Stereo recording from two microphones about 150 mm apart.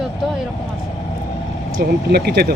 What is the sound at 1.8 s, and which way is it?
Speech, 90° right.